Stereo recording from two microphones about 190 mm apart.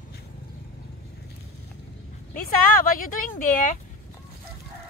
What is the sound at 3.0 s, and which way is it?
Speech, 45° left (ahead or behind).